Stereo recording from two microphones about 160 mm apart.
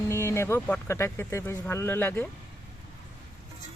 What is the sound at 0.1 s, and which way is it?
Speech, 15° left (ahead or behind).